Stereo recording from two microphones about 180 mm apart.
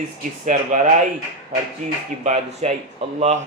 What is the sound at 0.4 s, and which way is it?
Speech, 45° right (ahead or behind).